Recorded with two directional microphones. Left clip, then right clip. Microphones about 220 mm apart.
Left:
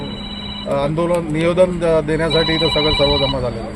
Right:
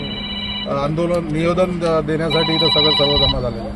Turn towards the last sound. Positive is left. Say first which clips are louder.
# right 1 dB
turn(degrees=-15)  # may be behind; listen again after turning